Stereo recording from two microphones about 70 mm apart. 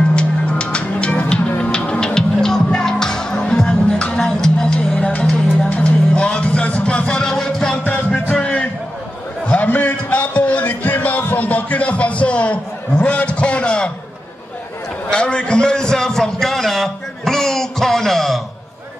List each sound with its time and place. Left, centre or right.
0.1 s music: centre
7.8 s music: left
15.0 s a sound: centre